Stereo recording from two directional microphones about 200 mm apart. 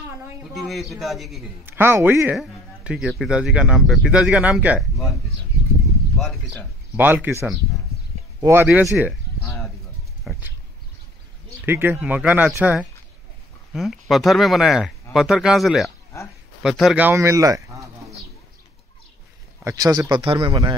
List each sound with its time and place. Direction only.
0.6 s speech: centre (ahead or behind)
1.8 s speech: 10° right (ahead or behind)
6.2 s speech: centre (ahead or behind)
10.3 s insect: 5° right (ahead or behind)
11.6 s speech: 10° right (ahead or behind)
19.6 s a man's voice: 15° right (ahead or behind)